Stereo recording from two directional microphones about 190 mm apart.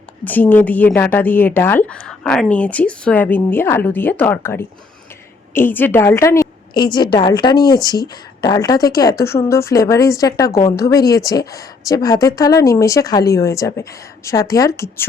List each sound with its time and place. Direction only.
0.3 s a woman's voice: 10° left (ahead or behind)